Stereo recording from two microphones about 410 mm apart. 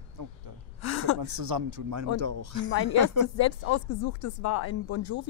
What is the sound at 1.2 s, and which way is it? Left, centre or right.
Speech, right.